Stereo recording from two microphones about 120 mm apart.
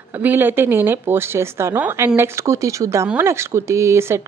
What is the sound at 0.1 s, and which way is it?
Speech, 15° right (ahead or behind).